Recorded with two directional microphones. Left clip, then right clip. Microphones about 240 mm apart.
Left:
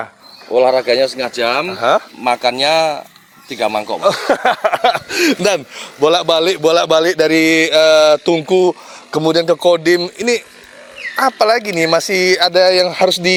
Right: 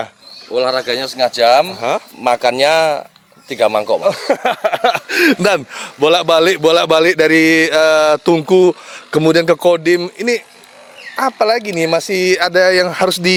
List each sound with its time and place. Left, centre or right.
0.5 s speech: centre
1.3 s a man's voice: right
1.7 s speech: centre
2.2 s a man's voice: right
4.0 s speech: centre
4.4 s speech: centre